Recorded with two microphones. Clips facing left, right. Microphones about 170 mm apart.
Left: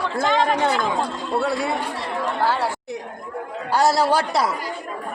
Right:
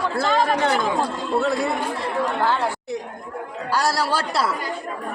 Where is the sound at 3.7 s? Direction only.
20° left (ahead or behind).